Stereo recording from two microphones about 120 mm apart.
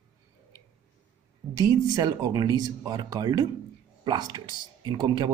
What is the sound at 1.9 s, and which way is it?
Speech, 30° right (ahead or behind).